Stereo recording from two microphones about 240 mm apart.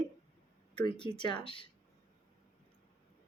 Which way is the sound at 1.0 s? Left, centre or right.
Centre.